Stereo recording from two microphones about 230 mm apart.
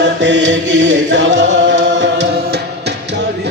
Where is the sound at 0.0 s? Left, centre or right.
Right.